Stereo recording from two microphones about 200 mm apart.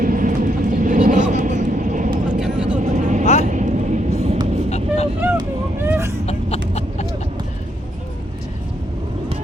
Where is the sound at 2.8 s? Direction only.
35° right (ahead or behind).